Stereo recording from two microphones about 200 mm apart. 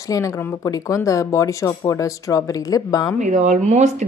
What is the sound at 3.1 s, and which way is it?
Speech, 35° right (ahead or behind).